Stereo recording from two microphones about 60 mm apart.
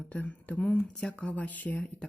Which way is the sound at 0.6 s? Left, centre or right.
Centre.